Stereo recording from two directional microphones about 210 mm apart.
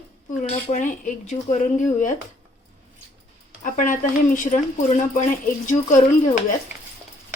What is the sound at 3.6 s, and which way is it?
Speech, 40° left (ahead or behind).